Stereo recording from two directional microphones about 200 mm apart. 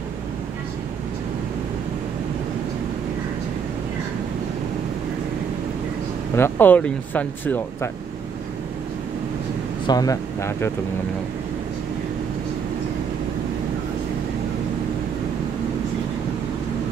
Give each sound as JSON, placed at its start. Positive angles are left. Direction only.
{"t": 6.3, "sound": "speech", "side_deg": 10}
{"t": 9.8, "sound": "speech", "side_deg": 20}